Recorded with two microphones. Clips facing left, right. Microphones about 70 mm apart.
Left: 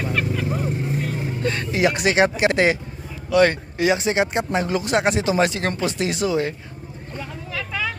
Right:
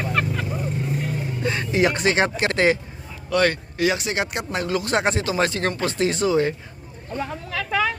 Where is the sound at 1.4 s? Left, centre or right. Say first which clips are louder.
Even; centre.